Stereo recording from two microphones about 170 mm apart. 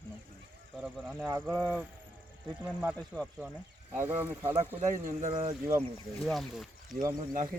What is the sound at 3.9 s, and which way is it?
Speech, 10° right (ahead or behind).